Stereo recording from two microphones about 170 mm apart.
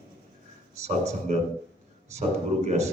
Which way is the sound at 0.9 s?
40° right (ahead or behind).